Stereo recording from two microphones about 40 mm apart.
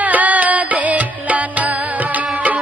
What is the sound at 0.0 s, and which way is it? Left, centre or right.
Music, right.